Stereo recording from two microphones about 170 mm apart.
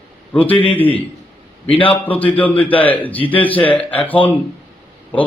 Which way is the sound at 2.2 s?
10° left (ahead or behind).